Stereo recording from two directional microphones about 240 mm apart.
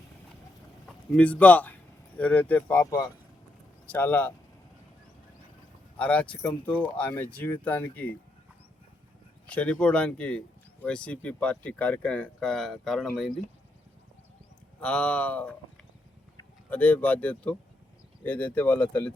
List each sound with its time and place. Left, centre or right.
0.9 s speech: centre
2.8 s speech: centre
6.0 s speech: centre
9.5 s speech: centre
14.8 s speech: centre